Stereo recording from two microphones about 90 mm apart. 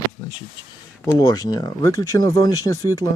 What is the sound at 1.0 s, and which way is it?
Speech, 40° left (ahead or behind).